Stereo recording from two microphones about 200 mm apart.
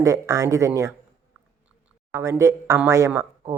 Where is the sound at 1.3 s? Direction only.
5° right (ahead or behind).